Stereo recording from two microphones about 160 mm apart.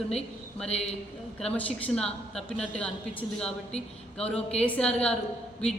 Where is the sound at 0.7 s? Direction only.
40° left (ahead or behind).